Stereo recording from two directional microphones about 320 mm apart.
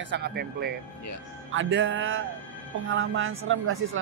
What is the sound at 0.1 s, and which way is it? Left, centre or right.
Speech, right.